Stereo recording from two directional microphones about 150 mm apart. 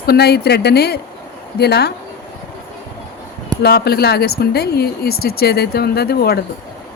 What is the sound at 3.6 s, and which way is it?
Speech, 90° left.